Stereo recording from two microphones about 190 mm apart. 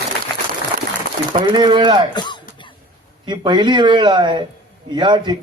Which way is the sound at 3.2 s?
25° right (ahead or behind).